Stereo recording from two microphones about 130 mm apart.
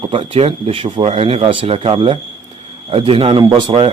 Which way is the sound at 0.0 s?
45° right (ahead or behind).